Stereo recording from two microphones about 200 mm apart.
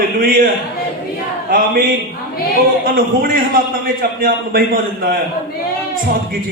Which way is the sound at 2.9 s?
45° right (ahead or behind).